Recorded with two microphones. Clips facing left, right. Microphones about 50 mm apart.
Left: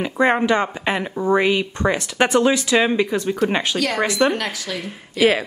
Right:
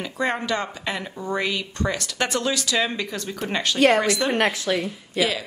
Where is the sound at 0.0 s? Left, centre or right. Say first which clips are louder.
Left 8 dB; left.